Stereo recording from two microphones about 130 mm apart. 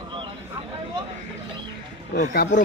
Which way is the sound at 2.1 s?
75° left (ahead or behind).